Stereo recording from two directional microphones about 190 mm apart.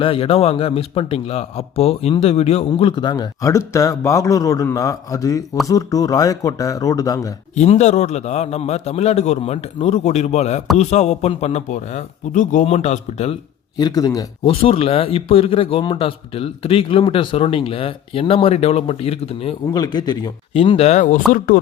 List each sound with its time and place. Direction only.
0.0 s a man's voice: 30° left (ahead or behind)
7.5 s a man's voice: 35° left (ahead or behind)
13.7 s a man's voice: 20° left (ahead or behind)
14.6 s a man's voice: 30° left (ahead or behind); by 21.6 s 50° left (ahead or behind)